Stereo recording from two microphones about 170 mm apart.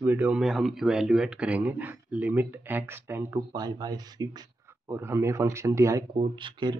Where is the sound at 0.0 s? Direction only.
10° right (ahead or behind).